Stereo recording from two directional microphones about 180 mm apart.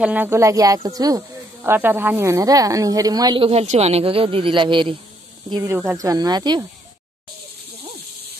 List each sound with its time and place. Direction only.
0.0 s speech: 10° right (ahead or behind); by 4.9 s 25° right (ahead or behind)
5.6 s speech: 10° right (ahead or behind)